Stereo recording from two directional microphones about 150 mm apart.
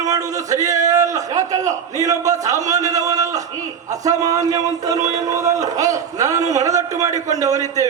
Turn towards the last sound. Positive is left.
turn(degrees=-25)  # may be behind; listen again after turning